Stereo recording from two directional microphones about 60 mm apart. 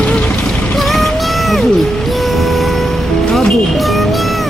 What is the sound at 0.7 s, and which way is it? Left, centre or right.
Music, centre.